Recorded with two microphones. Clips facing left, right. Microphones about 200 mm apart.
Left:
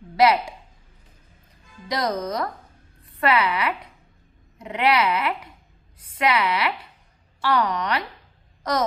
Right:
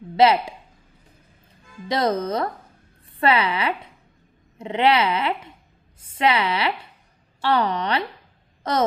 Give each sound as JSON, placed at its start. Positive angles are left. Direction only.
{"t": 0.1, "sound": "a woman's voice", "side_deg": -25}
{"t": 1.9, "sound": "dog", "side_deg": -30}
{"t": 3.1, "sound": "speech", "side_deg": -30}
{"t": 4.6, "sound": "dog", "side_deg": -25}